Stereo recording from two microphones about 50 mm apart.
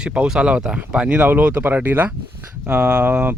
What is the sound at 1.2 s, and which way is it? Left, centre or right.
Speech, right.